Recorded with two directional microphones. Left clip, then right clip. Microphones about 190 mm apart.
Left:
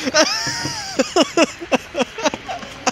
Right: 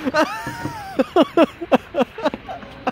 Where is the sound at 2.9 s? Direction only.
5° right (ahead or behind).